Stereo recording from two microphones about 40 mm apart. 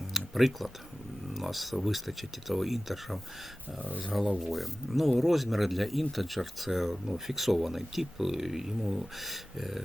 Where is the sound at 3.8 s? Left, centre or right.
Right.